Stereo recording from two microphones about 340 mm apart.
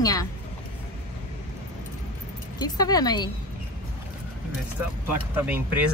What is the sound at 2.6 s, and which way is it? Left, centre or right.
Speech, centre.